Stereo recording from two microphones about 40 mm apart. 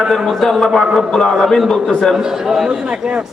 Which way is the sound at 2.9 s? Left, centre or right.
Right.